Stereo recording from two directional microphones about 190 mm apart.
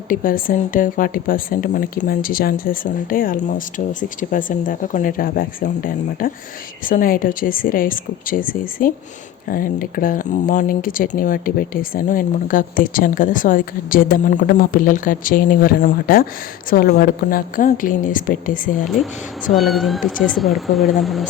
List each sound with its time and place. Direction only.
0.1 s speech: 45° left (ahead or behind)
19.5 s speech: centre (ahead or behind)